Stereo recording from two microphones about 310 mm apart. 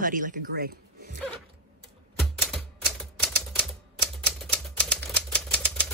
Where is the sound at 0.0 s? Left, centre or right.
Right.